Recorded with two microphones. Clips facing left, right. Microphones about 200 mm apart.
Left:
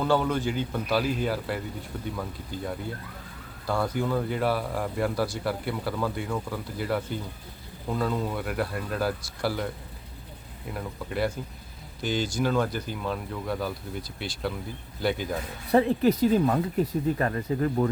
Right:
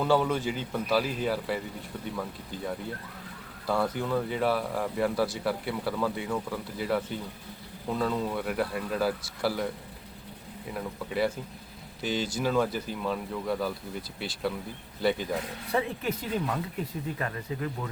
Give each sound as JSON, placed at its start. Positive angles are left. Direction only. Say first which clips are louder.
{"t": 0.0, "sound": "speech", "louder": "left 1 dB", "side_deg": -5}
{"t": 10.7, "sound": "speech", "louder": "even", "side_deg": 0}
{"t": 15.7, "sound": "speech", "louder": "left 9 dB", "side_deg": 35}